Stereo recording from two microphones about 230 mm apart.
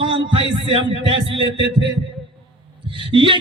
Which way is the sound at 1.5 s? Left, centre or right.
Right.